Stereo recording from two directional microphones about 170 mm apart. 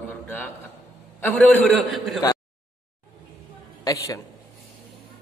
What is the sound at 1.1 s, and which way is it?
A man's voice, 10° left (ahead or behind).